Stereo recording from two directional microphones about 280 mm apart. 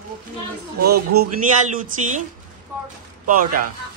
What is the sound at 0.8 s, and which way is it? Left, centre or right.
Speech, right.